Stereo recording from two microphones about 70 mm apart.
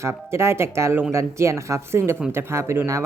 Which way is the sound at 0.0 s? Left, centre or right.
Right.